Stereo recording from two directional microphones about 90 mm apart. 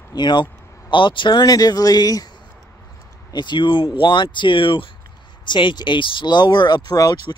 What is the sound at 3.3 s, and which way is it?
Speech, 55° left (ahead or behind).